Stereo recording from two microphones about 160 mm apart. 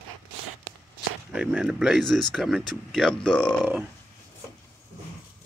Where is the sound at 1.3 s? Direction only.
5° right (ahead or behind).